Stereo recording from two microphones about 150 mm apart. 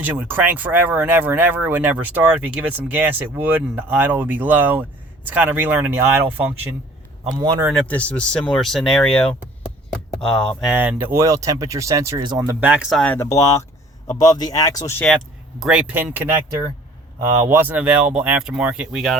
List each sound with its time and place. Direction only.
0.0 s speech: 10° right (ahead or behind)
7.3 s speech: 25° right (ahead or behind)
7.7 s speech: 10° left (ahead or behind)
10.7 s speech: 15° right (ahead or behind)
12.5 s speech: 10° right (ahead or behind)
12.9 s speech: 5° left (ahead or behind)
14.3 s speech: 25° left (ahead or behind)
15.6 s speech: 10° right (ahead or behind)
17.4 s speech: 15° right (ahead or behind)